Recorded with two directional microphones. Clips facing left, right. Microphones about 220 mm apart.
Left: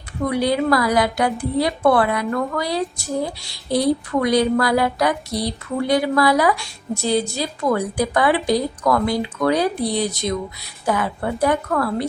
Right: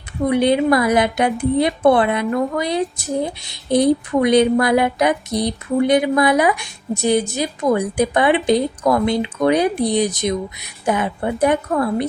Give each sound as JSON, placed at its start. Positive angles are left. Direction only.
{"t": 0.3, "sound": "a woman's voice", "side_deg": -20}